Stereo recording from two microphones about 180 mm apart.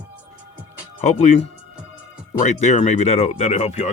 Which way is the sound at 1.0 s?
40° left (ahead or behind).